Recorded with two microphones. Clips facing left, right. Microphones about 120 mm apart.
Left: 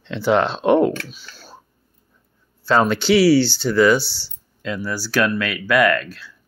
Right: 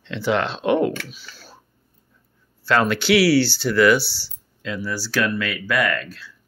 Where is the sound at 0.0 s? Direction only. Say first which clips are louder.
Left 4 dB; 40° left (ahead or behind).